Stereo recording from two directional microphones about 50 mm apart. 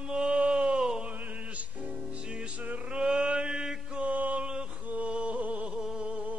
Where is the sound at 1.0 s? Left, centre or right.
Right.